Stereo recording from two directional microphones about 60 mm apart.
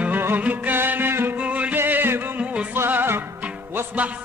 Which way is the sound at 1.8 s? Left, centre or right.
Right.